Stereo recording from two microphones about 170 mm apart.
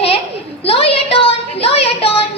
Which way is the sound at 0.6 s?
35° left (ahead or behind).